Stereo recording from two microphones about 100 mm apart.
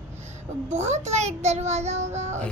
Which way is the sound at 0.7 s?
90° right.